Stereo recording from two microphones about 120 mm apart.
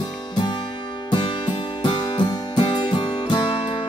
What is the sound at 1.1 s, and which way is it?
Music, 40° left (ahead or behind).